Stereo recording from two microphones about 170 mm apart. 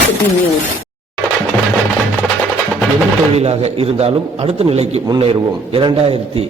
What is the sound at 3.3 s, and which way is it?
A man's voice, 40° right (ahead or behind).